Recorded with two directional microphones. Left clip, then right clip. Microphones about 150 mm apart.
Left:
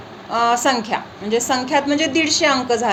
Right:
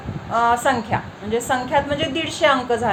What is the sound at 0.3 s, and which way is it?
A woman's voice, 35° left (ahead or behind).